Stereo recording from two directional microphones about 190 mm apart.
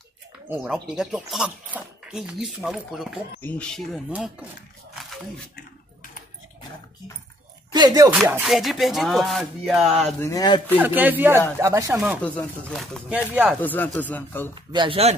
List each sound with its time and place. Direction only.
0.8 s speech: centre (ahead or behind)
4.1 s speech: 5° right (ahead or behind)
7.7 s speech: 20° right (ahead or behind)
8.1 s speech: 5° right (ahead or behind)
10.2 s speech: 20° left (ahead or behind)
10.8 s speech: 10° right (ahead or behind)
12.1 s speech: 5° left (ahead or behind)
13.6 s speech: 10° left (ahead or behind)
14.5 s speech: 25° right (ahead or behind)